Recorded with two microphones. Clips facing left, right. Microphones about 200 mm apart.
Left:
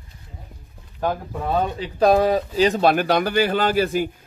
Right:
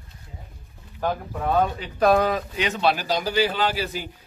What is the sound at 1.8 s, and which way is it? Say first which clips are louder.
Speech: left 5 dB; 30° left (ahead or behind).